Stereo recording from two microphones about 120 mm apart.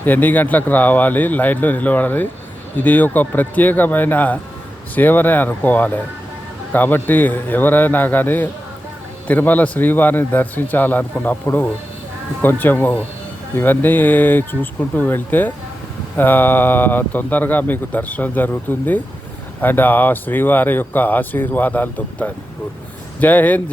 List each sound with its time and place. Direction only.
0.0 s speech: 15° left (ahead or behind)